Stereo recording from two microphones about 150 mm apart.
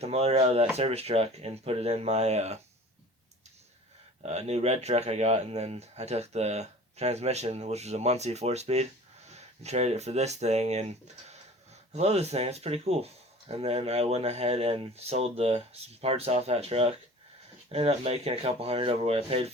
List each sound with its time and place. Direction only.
0.0 s speech: 45° right (ahead or behind)
4.2 s speech: 45° right (ahead or behind)